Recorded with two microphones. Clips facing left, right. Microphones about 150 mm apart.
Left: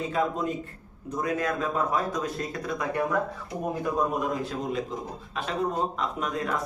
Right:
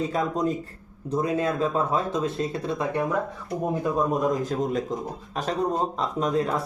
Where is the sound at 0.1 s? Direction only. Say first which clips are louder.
Right 2 dB; 40° right (ahead or behind).